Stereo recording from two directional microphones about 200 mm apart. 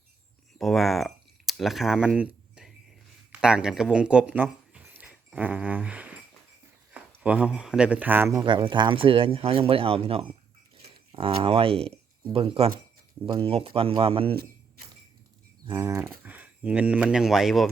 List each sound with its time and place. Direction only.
0.6 s speech: centre (ahead or behind); by 14.3 s 25° right (ahead or behind)
15.6 s speech: 15° right (ahead or behind); by 17.7 s centre (ahead or behind)